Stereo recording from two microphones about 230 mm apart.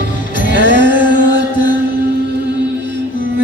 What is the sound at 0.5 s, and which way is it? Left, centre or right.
Music, right.